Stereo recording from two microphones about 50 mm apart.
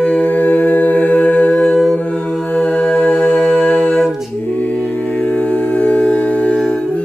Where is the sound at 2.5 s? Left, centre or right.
Left.